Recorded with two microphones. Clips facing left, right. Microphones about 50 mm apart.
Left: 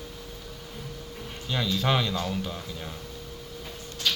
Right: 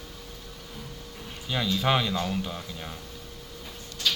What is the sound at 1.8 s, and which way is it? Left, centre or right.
A man's voice, centre.